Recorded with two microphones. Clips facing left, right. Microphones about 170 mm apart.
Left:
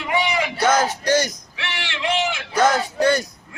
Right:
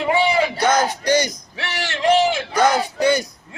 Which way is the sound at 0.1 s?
30° right (ahead or behind).